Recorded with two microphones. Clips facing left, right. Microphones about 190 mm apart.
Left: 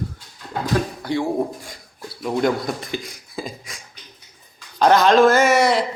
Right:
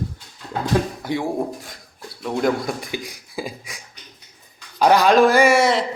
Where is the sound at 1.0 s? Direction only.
15° right (ahead or behind).